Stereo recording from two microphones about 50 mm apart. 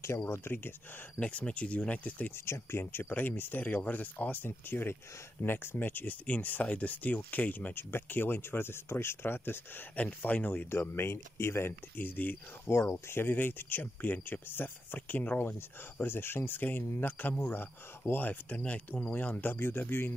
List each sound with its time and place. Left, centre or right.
0.3 s speech: left
1.2 s speech: left
2.3 s speech: left
4.5 s speech: left
7.7 s speech: left
9.9 s speech: left
10.7 s speech: left
12.0 s speech: left
12.6 s speech: left